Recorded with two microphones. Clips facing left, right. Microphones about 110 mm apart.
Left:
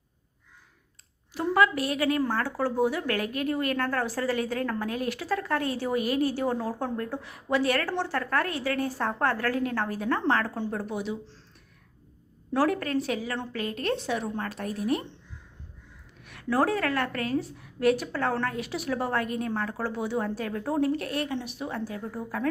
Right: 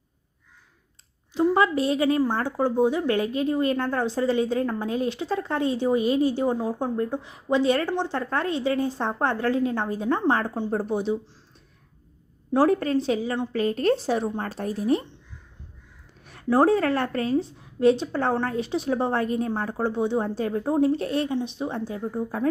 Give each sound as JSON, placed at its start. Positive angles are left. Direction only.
{"t": 1.3, "sound": "a woman's voice", "side_deg": -25}
{"t": 12.5, "sound": "a woman's voice", "side_deg": -30}
{"t": 16.2, "sound": "a woman's voice", "side_deg": -30}